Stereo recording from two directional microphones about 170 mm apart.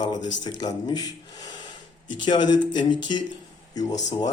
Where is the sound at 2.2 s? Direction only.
25° left (ahead or behind).